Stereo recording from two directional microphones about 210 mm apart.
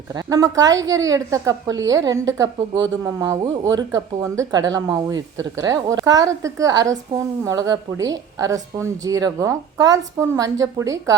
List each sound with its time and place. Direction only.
0.1 s a woman's voice: 15° right (ahead or behind)